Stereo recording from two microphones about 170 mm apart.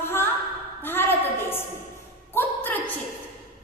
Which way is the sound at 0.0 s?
15° left (ahead or behind).